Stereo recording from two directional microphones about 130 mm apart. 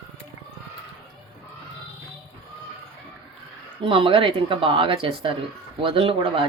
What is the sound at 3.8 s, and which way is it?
Speech, 45° right (ahead or behind).